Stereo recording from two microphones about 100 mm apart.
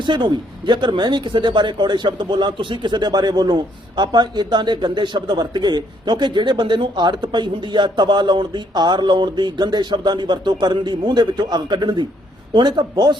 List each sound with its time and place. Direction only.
0.0 s speech: 50° right (ahead or behind)